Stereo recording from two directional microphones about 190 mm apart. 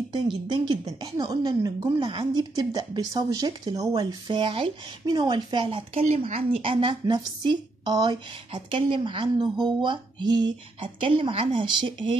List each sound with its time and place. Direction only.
0.1 s speech: 25° right (ahead or behind)
10.8 s speech: 30° right (ahead or behind)